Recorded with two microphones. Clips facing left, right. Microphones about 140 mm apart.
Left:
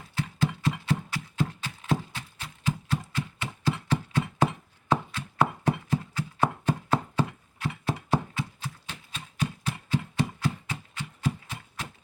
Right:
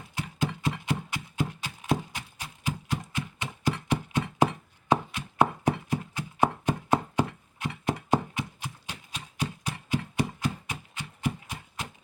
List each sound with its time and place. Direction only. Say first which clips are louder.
0.1 s music: left 2 dB; 15° right (ahead or behind)